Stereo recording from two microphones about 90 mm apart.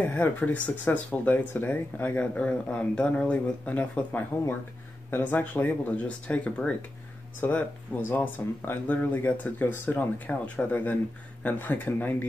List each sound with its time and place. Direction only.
0.0 s speech: 20° left (ahead or behind)